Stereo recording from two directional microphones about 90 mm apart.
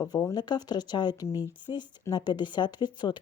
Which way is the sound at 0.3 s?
50° left (ahead or behind).